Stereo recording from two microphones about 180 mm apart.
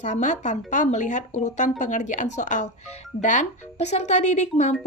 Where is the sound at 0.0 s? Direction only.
45° left (ahead or behind).